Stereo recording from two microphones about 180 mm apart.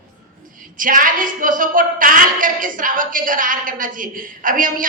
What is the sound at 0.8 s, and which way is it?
A woman's voice, 50° right (ahead or behind).